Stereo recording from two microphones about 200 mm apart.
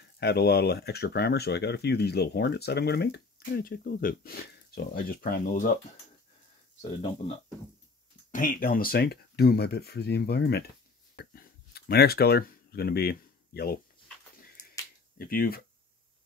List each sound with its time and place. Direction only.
0.2 s speech: 55° left (ahead or behind)
7.0 s speech: 30° left (ahead or behind)
8.3 s speech: 45° left (ahead or behind)
11.1 s a sound: 50° left (ahead or behind)
15.1 s speech: 45° left (ahead or behind)